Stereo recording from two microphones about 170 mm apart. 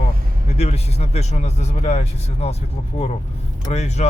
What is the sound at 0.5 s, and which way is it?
A man's voice, 40° left (ahead or behind).